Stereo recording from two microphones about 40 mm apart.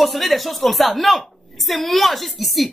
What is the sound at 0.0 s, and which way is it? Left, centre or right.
A woman's voice, centre.